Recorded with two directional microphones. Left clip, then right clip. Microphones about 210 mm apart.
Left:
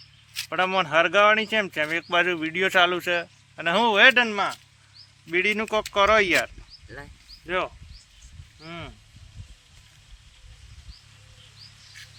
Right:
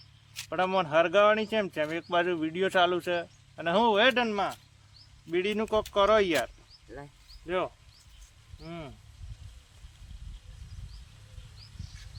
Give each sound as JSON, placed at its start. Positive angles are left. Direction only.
{"t": 0.3, "sound": "speech", "side_deg": 5}